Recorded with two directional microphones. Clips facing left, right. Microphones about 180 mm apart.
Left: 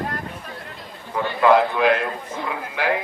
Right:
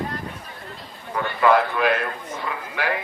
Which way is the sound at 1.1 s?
15° left (ahead or behind).